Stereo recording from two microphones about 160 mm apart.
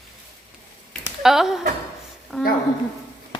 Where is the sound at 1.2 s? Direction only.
Centre (ahead or behind).